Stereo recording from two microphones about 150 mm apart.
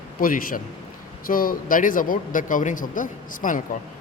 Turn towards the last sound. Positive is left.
turn(degrees=60)  # may be behind; listen again after turning